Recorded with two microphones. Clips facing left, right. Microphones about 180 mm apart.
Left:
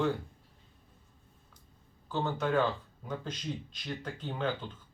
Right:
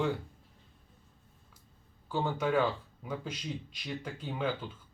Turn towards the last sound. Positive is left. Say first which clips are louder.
# even
turn(degrees=-10)  # may be behind; listen again after turning